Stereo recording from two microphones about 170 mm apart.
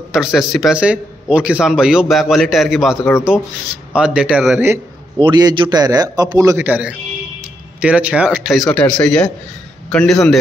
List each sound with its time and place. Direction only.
0.1 s a man's voice: centre (ahead or behind)
3.0 s speech: 15° left (ahead or behind)
3.9 s a man's voice: 5° right (ahead or behind)
5.2 s a man's voice: 25° right (ahead or behind); by 10.4 s centre (ahead or behind)